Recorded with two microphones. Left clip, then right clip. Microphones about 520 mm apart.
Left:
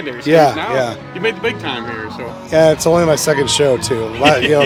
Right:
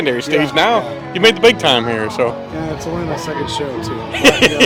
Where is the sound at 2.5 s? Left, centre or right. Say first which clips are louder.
Left 12 dB; left.